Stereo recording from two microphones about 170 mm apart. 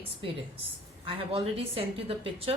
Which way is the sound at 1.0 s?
35° right (ahead or behind).